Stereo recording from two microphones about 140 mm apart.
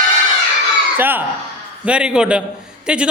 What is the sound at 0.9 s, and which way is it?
A man's voice, 15° right (ahead or behind).